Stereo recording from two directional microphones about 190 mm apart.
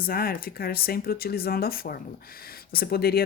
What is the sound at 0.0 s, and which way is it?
Speech, 50° left (ahead or behind).